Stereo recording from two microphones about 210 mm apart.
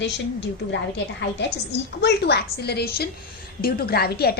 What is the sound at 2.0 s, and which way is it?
A woman's voice, 50° left (ahead or behind).